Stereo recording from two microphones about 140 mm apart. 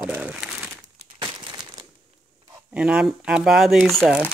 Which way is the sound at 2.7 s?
5° right (ahead or behind).